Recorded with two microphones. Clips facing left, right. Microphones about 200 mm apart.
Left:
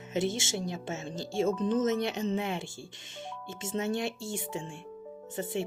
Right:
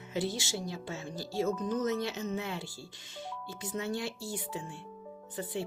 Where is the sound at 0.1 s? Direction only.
20° left (ahead or behind).